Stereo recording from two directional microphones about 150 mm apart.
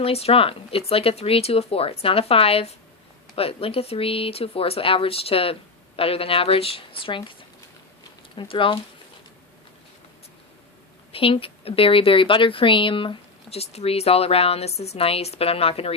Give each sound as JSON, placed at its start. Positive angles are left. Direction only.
{"t": 0.0, "sound": "a woman's voice", "side_deg": 40}
{"t": 8.4, "sound": "a woman's voice", "side_deg": 35}
{"t": 11.1, "sound": "a woman's voice", "side_deg": 35}